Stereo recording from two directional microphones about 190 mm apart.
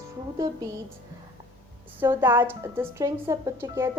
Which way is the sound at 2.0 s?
10° right (ahead or behind).